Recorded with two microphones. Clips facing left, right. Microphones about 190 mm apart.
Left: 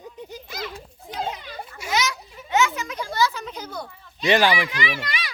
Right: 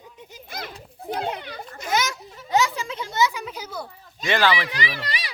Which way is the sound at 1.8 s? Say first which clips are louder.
Right 1 dB; 50° right (ahead or behind).